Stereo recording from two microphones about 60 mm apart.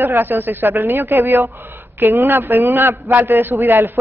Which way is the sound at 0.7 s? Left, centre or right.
Right.